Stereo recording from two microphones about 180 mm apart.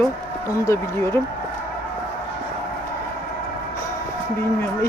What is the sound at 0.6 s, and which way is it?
Speech, 15° left (ahead or behind).